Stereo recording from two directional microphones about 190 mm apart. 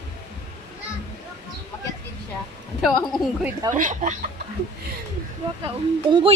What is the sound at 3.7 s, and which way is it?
Speech, 40° right (ahead or behind).